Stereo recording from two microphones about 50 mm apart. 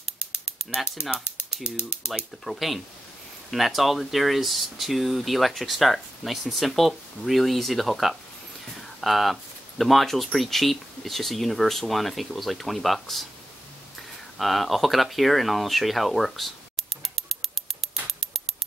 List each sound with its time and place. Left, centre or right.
1.1 s speech: left
2.4 s speech: centre
14.4 s speech: centre